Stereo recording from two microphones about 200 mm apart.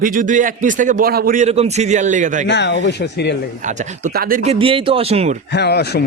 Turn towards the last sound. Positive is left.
turn(degrees=55)  # may be behind; listen again after turning